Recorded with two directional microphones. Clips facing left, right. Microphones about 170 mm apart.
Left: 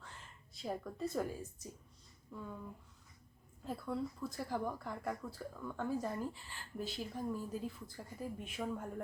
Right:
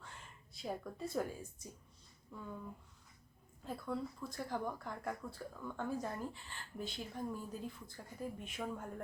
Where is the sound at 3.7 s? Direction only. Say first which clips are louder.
Left 1 dB; 5° left (ahead or behind).